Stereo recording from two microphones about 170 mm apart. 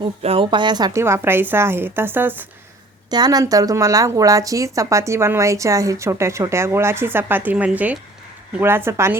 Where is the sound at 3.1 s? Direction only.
25° right (ahead or behind).